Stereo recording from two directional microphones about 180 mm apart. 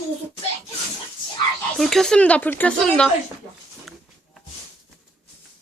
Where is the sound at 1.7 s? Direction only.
Centre (ahead or behind).